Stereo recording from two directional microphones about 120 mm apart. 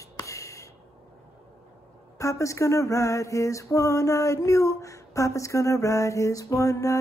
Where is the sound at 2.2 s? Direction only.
25° left (ahead or behind).